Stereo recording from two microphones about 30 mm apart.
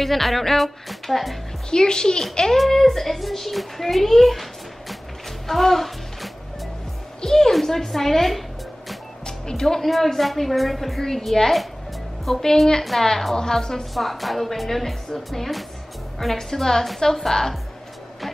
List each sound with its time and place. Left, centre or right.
0.0 s a child's voice: centre
1.7 s a child's voice: left
2.5 s a child's voice: centre
5.5 s music: centre
7.2 s a woman's voice: left; by 8.9 s centre
9.2 s music: left
9.8 s a child's voice: centre
13.9 s a child's voice: centre